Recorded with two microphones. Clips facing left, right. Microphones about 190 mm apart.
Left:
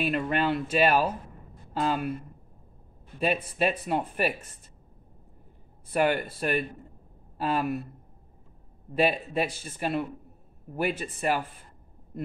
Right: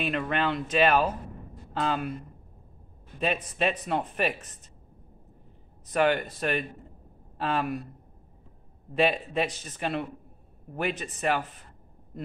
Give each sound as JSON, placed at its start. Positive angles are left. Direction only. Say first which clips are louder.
{"t": 0.0, "sound": "speech", "louder": "left 1 dB", "side_deg": 5}
{"t": 3.2, "sound": "speech", "louder": "left 2 dB", "side_deg": 10}
{"t": 5.9, "sound": "speech", "louder": "right 1 dB", "side_deg": 10}
{"t": 8.9, "sound": "speech", "louder": "even", "side_deg": 10}